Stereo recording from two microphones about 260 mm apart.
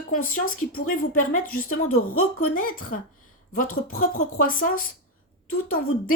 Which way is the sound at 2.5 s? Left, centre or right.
Left.